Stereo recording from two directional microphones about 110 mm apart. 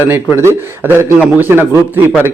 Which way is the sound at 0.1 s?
20° right (ahead or behind).